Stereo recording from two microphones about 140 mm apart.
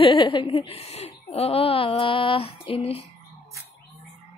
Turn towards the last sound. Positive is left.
turn(degrees=45)  # may be behind; listen again after turning